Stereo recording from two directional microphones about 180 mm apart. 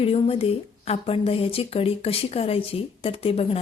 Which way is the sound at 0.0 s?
30° left (ahead or behind).